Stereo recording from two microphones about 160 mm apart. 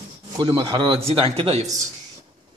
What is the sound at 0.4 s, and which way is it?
Speech, 35° right (ahead or behind).